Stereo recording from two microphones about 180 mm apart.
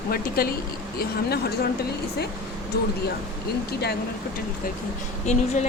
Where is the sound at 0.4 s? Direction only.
55° left (ahead or behind).